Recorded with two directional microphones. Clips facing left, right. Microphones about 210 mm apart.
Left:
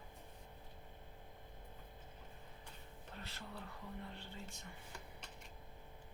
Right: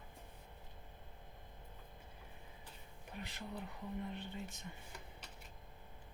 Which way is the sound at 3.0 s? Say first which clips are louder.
Right 5 dB; 15° right (ahead or behind).